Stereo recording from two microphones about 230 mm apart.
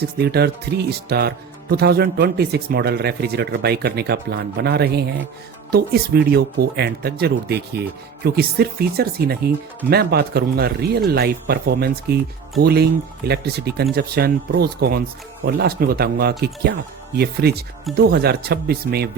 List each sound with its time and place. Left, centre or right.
0.2 s speech: right